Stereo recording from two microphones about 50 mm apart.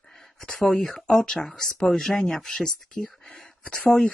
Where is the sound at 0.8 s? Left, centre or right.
Centre.